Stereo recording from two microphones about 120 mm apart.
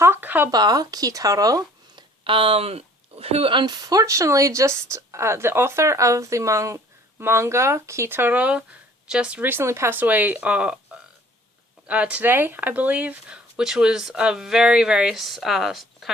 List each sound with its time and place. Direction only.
0.0 s speech: 15° right (ahead or behind)
0.5 s speech: 35° right (ahead or behind)
2.2 s speech: 50° right (ahead or behind); by 10.8 s 10° right (ahead or behind)
11.9 s speech: 10° right (ahead or behind)